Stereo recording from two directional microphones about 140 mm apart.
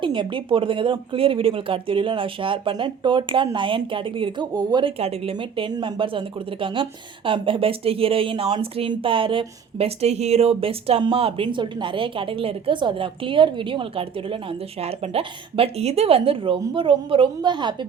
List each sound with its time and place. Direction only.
0.0 s a woman's voice: 35° right (ahead or behind)
4.9 s a woman's voice: 45° right (ahead or behind)